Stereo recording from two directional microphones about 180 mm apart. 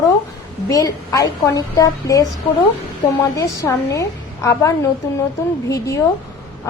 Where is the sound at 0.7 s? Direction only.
20° left (ahead or behind).